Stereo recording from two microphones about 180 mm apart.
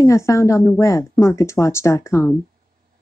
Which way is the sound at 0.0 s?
15° left (ahead or behind).